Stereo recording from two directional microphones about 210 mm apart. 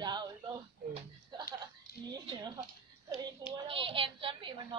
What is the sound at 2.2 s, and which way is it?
Speech, 20° right (ahead or behind).